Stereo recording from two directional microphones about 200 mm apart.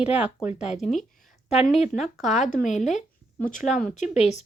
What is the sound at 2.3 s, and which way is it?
Speech, 40° left (ahead or behind).